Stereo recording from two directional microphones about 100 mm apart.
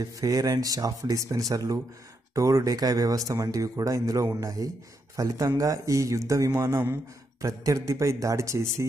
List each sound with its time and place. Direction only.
0.0 s speech: 35° right (ahead or behind)